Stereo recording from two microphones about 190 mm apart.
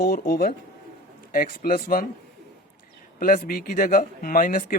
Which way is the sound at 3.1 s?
50° left (ahead or behind).